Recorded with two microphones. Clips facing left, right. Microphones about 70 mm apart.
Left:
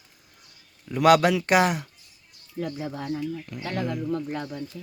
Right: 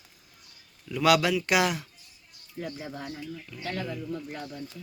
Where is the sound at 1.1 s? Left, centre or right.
Left.